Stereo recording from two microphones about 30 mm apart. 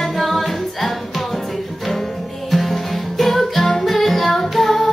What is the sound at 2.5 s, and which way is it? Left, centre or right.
Music, centre.